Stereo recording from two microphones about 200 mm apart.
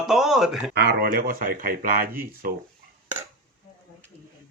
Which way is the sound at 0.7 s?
50° right (ahead or behind).